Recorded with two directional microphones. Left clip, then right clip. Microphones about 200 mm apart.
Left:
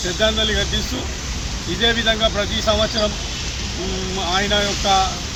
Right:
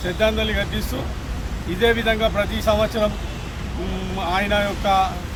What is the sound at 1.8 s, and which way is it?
Speech, 20° right (ahead or behind).